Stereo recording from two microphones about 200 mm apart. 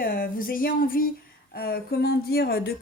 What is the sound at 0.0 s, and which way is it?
Speech, 45° left (ahead or behind).